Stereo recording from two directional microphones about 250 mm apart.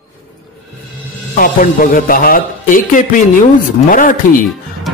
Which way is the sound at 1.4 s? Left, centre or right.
Left.